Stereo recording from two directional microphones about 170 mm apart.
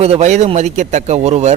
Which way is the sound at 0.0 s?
40° right (ahead or behind).